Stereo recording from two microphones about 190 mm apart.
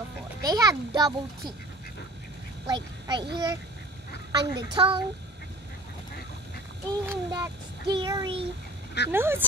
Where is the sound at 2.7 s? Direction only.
20° right (ahead or behind).